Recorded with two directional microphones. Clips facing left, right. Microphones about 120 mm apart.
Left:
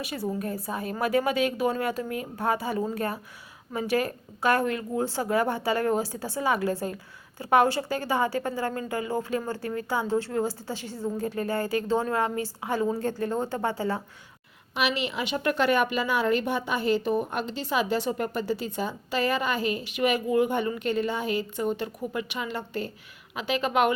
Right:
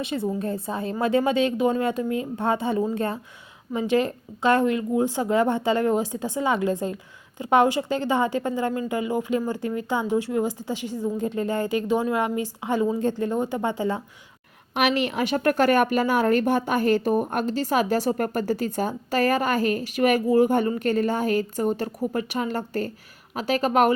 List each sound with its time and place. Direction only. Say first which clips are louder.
0.0 s a woman's voice: right 4 dB; 25° right (ahead or behind)
14.8 s a woman's voice: right 5 dB; 50° right (ahead or behind)